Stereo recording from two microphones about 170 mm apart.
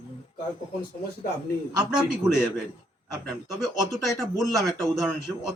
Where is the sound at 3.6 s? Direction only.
Centre (ahead or behind).